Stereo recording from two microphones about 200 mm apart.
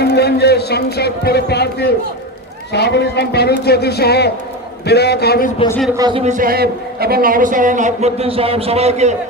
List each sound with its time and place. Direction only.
0.0 s a man's voice: 55° left (ahead or behind)
6.0 s speech: 20° right (ahead or behind)
6.2 s a man's voice: 40° right (ahead or behind)